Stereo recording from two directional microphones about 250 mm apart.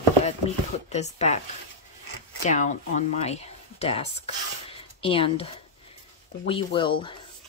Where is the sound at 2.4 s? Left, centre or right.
Left.